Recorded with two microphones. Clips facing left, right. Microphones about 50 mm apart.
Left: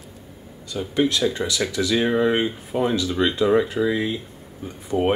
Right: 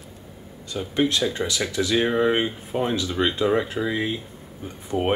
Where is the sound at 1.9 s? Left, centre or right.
Centre.